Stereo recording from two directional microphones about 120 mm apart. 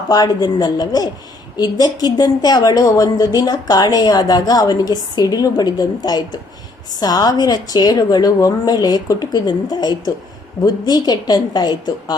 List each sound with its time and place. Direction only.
0.1 s a woman's voice: 35° left (ahead or behind)